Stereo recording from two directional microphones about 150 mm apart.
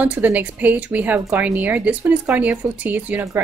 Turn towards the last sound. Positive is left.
turn(degrees=-10)  # may be behind; listen again after turning